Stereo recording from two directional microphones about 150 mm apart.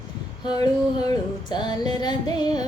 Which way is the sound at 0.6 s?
30° left (ahead or behind).